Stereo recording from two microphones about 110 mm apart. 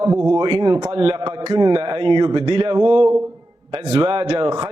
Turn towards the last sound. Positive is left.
turn(degrees=-50)  # may be behind; listen again after turning